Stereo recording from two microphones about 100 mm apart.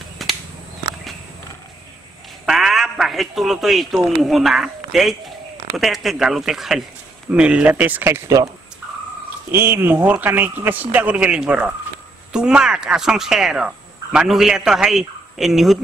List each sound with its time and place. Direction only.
0.2 s a sound: centre (ahead or behind)
2.4 s a man's voice: 5° right (ahead or behind); by 8.4 s 25° right (ahead or behind)
9.5 s speech: 25° right (ahead or behind); by 15.8 s centre (ahead or behind)